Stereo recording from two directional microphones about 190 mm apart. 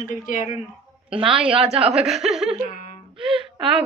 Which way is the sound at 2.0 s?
Centre (ahead or behind).